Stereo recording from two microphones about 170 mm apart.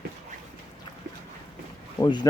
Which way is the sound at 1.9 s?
20° left (ahead or behind).